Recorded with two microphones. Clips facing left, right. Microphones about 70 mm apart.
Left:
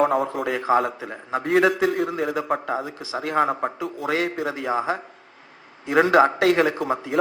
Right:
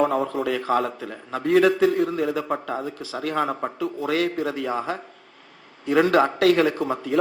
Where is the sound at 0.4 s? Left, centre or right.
Centre.